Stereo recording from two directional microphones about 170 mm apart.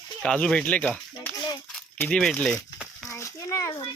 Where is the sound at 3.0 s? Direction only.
20° left (ahead or behind).